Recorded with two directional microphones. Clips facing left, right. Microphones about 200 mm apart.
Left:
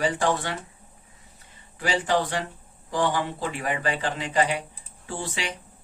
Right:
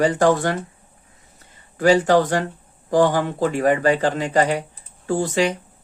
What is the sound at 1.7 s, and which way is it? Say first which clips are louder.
Speech: right 10 dB; 45° right (ahead or behind).